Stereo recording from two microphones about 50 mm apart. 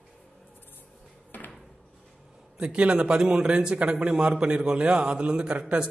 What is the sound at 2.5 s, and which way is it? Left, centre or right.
A man's voice, right.